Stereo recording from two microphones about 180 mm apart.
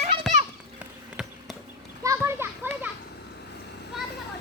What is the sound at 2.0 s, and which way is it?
Children playing, 15° right (ahead or behind).